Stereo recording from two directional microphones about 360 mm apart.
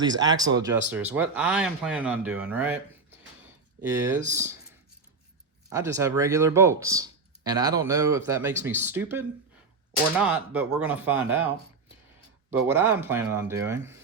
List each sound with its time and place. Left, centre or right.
0.0 s speech: centre
4.3 s speech: centre
5.6 s speech: centre